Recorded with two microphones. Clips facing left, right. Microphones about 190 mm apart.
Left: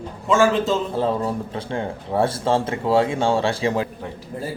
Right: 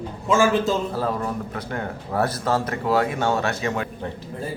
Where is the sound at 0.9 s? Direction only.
25° left (ahead or behind).